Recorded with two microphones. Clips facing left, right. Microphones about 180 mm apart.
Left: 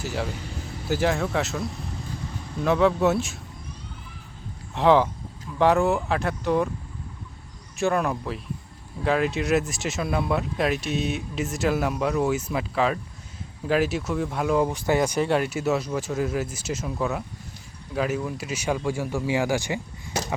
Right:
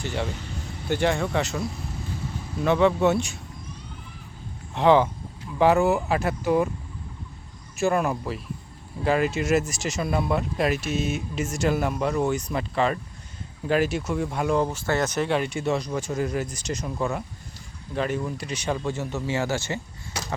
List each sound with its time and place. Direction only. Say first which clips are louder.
0.0 s speech: even; 5° left (ahead or behind)
4.7 s speech: even; centre (ahead or behind)
7.8 s speech: right 1 dB; centre (ahead or behind); by 20.2 s 15° left (ahead or behind)